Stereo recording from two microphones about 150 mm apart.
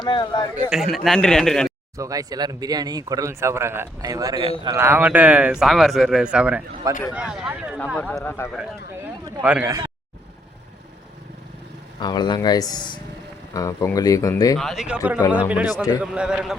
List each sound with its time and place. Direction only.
0.0 s speech: 30° left (ahead or behind)
0.7 s a man's voice: centre (ahead or behind)
2.0 s speech: 25° right (ahead or behind)
7.9 s speech: 10° left (ahead or behind)
9.4 s speech: 10° right (ahead or behind)
11.9 s speech: 30° left (ahead or behind)
14.6 s a man's voice: centre (ahead or behind)